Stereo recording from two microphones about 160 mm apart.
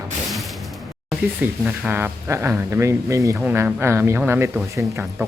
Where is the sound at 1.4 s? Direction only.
10° right (ahead or behind).